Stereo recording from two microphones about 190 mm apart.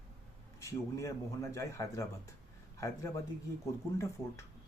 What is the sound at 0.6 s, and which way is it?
A man's voice, 15° left (ahead or behind).